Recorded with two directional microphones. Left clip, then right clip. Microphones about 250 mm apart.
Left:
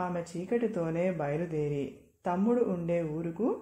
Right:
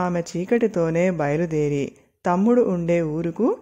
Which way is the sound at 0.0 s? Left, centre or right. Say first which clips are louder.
Right 10 dB; right.